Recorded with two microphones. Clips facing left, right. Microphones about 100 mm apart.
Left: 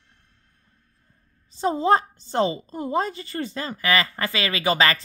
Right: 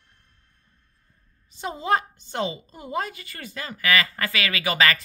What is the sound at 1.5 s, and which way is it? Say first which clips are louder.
A woman's voice: left 5 dB; 35° left (ahead or behind).